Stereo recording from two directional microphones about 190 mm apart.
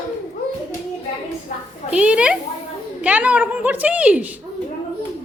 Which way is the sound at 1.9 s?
5° right (ahead or behind).